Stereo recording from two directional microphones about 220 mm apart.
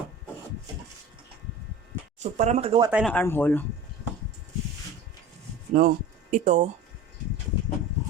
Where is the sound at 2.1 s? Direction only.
30° right (ahead or behind).